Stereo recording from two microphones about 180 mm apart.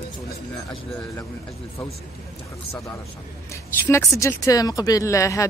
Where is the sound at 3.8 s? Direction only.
15° left (ahead or behind).